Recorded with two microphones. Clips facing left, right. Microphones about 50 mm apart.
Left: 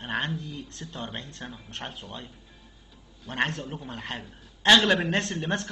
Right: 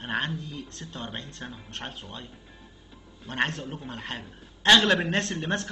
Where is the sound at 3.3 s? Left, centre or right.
Centre.